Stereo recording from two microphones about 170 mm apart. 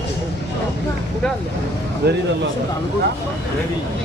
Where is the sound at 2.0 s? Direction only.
70° right (ahead or behind).